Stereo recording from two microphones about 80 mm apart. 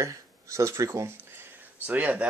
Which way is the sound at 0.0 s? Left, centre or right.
Right.